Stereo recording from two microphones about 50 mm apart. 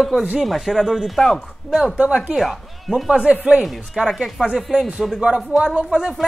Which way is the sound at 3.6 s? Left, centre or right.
Centre.